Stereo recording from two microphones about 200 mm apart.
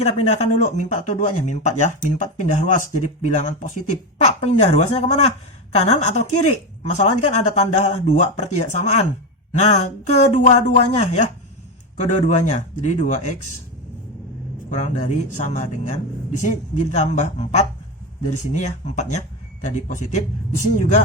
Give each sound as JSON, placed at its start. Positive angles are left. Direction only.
{"t": 0.0, "sound": "speech", "side_deg": 35}
{"t": 14.7, "sound": "speech", "side_deg": 35}